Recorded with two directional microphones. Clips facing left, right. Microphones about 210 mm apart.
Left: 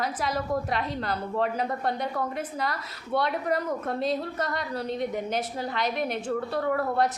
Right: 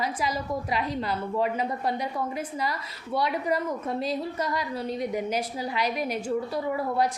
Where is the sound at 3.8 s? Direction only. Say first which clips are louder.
Left 1 dB; 5° right (ahead or behind).